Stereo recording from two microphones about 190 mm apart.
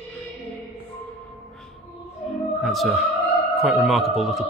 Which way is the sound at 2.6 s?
Centre (ahead or behind).